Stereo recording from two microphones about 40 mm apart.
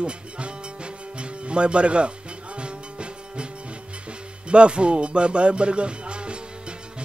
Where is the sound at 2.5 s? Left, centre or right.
Right.